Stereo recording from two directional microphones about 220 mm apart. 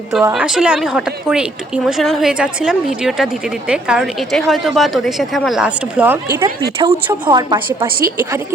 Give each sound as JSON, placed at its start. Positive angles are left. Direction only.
{"t": 0.3, "sound": "a woman's voice", "side_deg": -5}